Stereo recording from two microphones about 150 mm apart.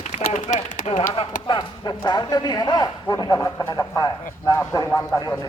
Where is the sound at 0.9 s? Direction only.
35° left (ahead or behind); by 5.3 s 20° left (ahead or behind).